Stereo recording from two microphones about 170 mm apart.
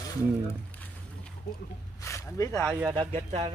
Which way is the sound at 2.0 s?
20° left (ahead or behind).